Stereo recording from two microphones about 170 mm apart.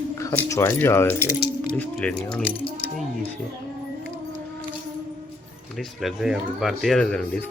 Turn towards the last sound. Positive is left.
turn(degrees=5)  # may be behind; listen again after turning